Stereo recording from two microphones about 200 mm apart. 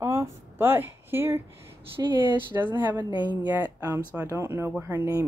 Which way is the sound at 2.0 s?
20° right (ahead or behind).